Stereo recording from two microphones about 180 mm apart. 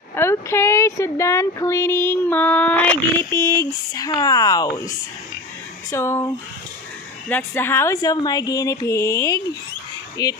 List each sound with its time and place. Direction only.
0.1 s speech: 15° left (ahead or behind)
7.2 s speech: 10° left (ahead or behind)